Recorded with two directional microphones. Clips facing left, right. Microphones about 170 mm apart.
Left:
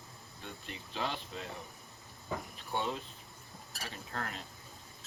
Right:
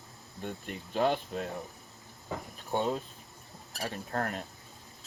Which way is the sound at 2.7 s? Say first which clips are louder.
Right 6 dB; 45° right (ahead or behind).